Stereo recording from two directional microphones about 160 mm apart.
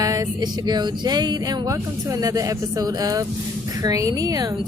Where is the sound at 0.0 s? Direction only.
25° right (ahead or behind).